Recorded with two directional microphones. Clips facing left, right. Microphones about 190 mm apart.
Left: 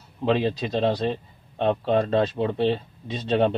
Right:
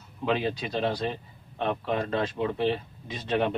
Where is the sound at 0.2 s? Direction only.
35° left (ahead or behind).